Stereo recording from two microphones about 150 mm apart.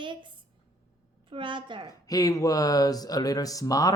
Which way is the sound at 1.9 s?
25° left (ahead or behind).